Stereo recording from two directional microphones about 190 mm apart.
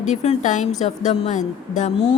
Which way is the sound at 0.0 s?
35° left (ahead or behind).